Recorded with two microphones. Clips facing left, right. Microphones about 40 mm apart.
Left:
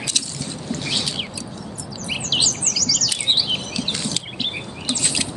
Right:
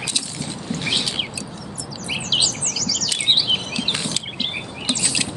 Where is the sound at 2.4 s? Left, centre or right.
Right.